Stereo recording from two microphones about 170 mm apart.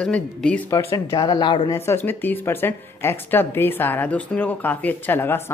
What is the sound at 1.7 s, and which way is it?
Speech, 15° left (ahead or behind).